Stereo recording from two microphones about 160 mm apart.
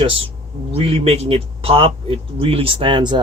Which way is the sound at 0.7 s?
40° right (ahead or behind).